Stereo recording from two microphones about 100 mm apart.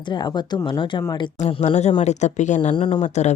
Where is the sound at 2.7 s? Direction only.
55° left (ahead or behind).